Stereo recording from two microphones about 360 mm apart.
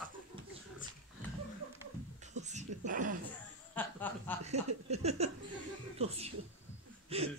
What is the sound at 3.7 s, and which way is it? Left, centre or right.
Chuckle, centre.